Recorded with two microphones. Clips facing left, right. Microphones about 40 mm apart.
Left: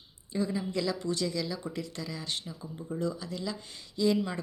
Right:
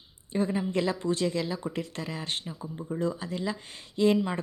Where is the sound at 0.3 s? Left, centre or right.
Right.